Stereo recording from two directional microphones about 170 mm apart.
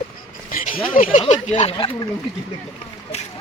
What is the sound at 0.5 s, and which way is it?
Speech, 50° left (ahead or behind).